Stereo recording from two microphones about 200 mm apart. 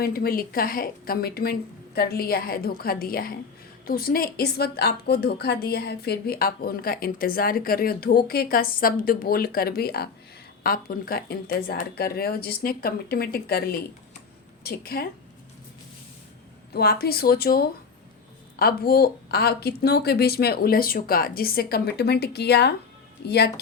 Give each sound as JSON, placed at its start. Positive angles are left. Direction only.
{"t": 0.0, "sound": "a woman's voice", "side_deg": 50}
{"t": 16.7, "sound": "a woman's voice", "side_deg": 50}